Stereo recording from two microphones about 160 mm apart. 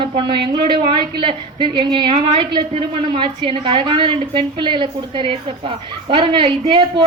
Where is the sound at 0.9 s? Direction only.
30° right (ahead or behind).